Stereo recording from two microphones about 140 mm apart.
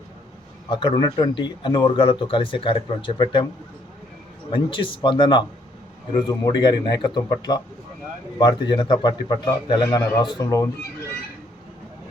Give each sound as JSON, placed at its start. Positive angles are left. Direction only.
{"t": 0.7, "sound": "speech", "side_deg": 35}
{"t": 4.5, "sound": "a man's voice", "side_deg": 35}